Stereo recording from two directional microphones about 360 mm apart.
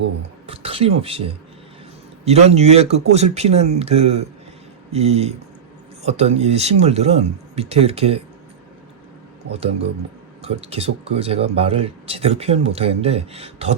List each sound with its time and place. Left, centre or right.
0.4 s a sound: centre
2.2 s speech: centre
9.5 s speech: centre